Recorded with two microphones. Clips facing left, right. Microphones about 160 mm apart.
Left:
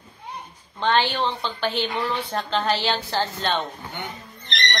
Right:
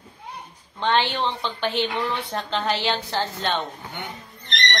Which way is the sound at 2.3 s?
20° right (ahead or behind).